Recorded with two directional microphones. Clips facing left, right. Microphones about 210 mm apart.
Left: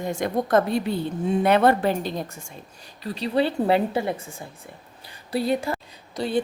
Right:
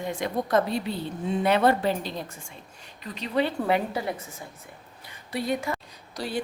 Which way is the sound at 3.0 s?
35° left (ahead or behind).